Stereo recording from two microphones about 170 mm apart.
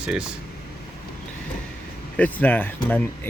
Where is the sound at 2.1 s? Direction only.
10° left (ahead or behind).